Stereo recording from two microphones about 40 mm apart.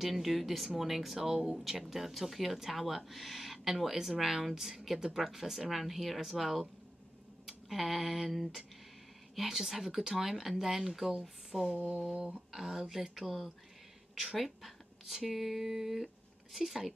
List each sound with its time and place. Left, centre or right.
0.0 s speech: centre
11.8 s a sound: right
12.5 s a woman's voice: centre